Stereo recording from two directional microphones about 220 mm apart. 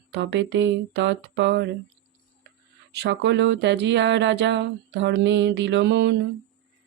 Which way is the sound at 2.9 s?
50° right (ahead or behind).